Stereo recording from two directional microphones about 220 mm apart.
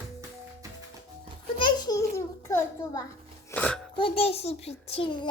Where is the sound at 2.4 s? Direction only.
15° left (ahead or behind).